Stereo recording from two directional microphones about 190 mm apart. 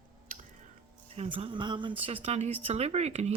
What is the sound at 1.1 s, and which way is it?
Speech, 30° right (ahead or behind).